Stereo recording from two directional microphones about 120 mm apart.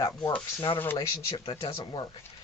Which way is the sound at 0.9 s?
40° left (ahead or behind).